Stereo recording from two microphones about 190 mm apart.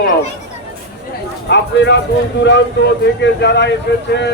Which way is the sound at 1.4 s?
65° left (ahead or behind).